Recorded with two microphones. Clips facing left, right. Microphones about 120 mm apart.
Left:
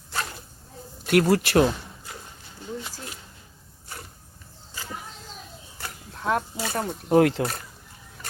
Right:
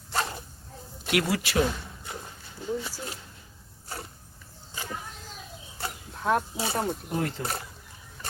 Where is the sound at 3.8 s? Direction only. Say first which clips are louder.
Right 3 dB; 30° right (ahead or behind).